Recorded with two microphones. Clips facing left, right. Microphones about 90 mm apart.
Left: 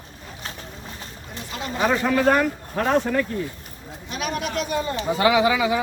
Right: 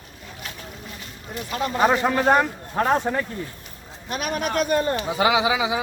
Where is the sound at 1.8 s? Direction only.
30° right (ahead or behind).